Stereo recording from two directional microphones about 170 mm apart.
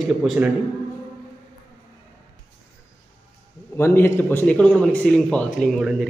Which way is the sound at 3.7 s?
15° left (ahead or behind).